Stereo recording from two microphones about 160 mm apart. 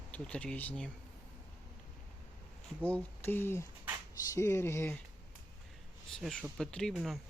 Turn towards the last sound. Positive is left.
turn(degrees=0)  # may be behind; listen again after turning